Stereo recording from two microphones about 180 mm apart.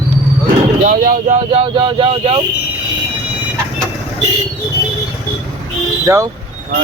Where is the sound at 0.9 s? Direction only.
50° right (ahead or behind).